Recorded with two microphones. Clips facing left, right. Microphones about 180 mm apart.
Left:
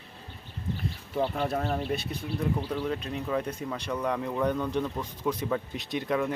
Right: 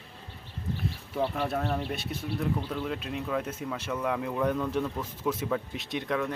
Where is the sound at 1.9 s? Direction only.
Centre (ahead or behind).